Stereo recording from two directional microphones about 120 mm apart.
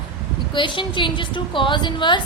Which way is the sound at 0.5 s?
45° left (ahead or behind).